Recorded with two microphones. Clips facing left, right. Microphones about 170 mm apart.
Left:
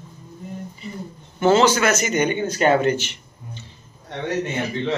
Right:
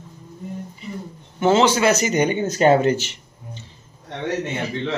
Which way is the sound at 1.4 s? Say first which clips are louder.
Even; 20° right (ahead or behind).